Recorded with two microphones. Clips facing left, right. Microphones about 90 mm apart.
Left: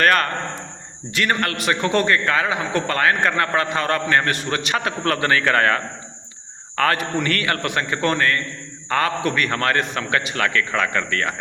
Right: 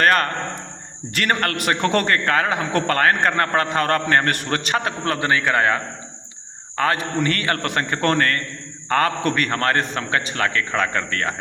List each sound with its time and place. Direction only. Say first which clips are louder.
0.0 s a man's voice: even; 35° right (ahead or behind)
1.1 s a man's voice: even; 50° right (ahead or behind)